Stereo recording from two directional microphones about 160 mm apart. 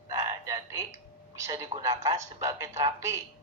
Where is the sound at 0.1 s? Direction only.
20° right (ahead or behind).